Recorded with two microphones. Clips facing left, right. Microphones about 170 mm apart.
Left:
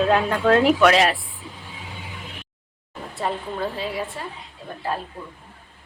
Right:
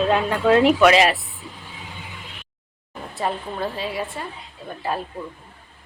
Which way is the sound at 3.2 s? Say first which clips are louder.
Right 1 dB; centre (ahead or behind).